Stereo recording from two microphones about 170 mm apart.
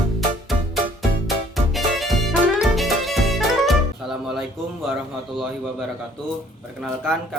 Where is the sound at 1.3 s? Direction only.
Centre (ahead or behind).